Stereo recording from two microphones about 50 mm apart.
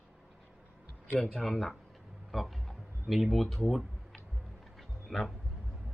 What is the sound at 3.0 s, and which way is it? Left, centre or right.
Speech, centre.